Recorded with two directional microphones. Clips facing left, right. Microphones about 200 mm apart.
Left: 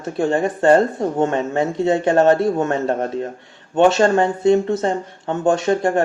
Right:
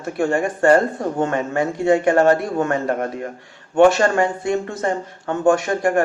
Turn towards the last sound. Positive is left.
turn(degrees=20)  # may be behind; listen again after turning